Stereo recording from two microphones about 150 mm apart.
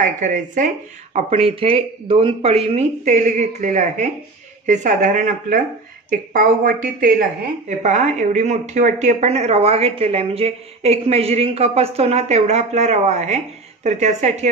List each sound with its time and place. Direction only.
0.0 s speech: 60° right (ahead or behind)
1.1 s a woman's voice: 40° right (ahead or behind); by 5.6 s 55° right (ahead or behind)
6.0 s a woman's voice: 65° right (ahead or behind); by 14.5 s 50° right (ahead or behind)